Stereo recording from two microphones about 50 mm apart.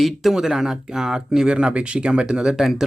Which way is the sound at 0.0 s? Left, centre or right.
Centre.